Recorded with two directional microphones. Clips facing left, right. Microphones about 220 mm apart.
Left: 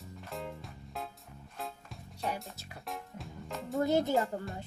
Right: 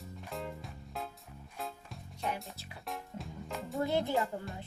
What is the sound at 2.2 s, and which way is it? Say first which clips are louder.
Music: left 1 dB; centre (ahead or behind).